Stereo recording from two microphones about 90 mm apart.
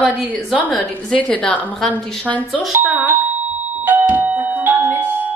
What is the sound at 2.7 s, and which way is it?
Doorbell, 20° right (ahead or behind).